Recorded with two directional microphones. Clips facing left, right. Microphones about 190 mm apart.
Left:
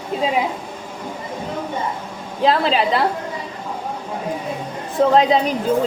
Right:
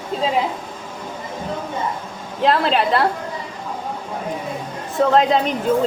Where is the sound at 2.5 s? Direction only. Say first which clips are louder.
Even; centre (ahead or behind).